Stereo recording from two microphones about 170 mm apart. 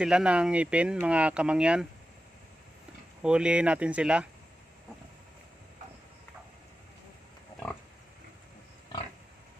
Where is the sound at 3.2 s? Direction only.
5° right (ahead or behind).